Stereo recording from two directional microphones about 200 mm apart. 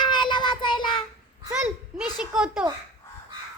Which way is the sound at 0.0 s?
20° left (ahead or behind).